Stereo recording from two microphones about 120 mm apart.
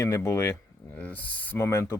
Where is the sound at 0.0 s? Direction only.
20° left (ahead or behind).